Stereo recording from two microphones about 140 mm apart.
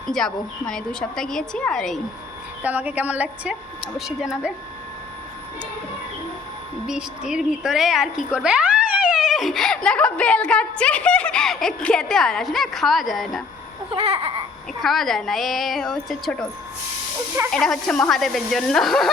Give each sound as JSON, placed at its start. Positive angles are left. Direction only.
{"t": 0.1, "sound": "a woman's voice", "side_deg": 5}
{"t": 2.6, "sound": "a woman's voice", "side_deg": -10}
{"t": 6.8, "sound": "a woman's voice", "side_deg": -5}
{"t": 13.9, "sound": "baby cry", "side_deg": -45}
{"t": 14.8, "sound": "a woman's voice", "side_deg": 0}
{"t": 17.5, "sound": "a woman's voice", "side_deg": 5}